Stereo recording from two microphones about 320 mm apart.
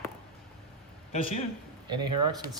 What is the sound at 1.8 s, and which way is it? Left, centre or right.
Speech, centre.